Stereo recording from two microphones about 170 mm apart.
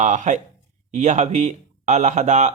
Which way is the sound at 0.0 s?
45° right (ahead or behind).